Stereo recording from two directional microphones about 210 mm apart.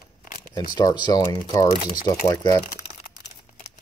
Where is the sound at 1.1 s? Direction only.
15° left (ahead or behind).